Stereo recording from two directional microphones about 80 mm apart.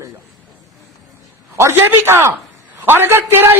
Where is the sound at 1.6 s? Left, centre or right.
Right.